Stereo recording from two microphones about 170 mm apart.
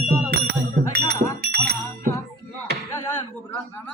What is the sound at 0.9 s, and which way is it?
Music, 70° right (ahead or behind).